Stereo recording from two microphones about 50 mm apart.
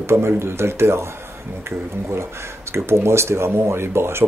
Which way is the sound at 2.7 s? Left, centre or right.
Right.